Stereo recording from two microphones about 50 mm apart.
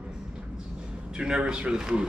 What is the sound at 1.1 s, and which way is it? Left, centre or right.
Speech, centre.